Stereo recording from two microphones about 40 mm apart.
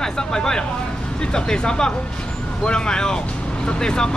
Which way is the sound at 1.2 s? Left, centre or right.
Left.